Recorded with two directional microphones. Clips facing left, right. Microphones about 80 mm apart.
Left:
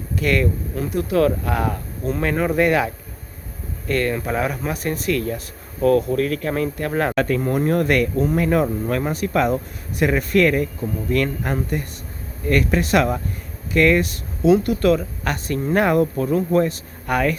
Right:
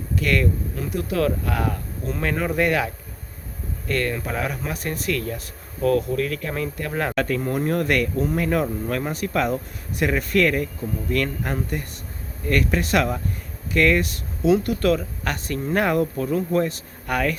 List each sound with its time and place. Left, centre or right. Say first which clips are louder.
0.2 s speech: left 2 dB; left
2.0 s speech: left 4 dB; left
6.1 s speech: left 4 dB; left
7.2 s speech: left 1 dB; left
7.4 s speech: left 3 dB; left
14.6 s speech: left 3 dB; centre; by 16.6 s left
16.6 s speech: left 3 dB; left